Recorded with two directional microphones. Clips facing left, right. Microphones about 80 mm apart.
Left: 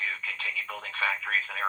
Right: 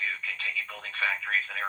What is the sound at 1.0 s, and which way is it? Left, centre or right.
Speech, left.